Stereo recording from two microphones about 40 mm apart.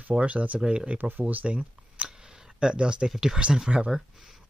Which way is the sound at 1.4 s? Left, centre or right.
Right.